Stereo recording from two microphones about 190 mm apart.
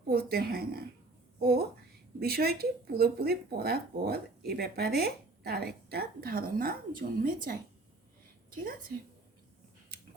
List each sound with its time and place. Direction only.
0.1 s a woman's voice: 55° right (ahead or behind)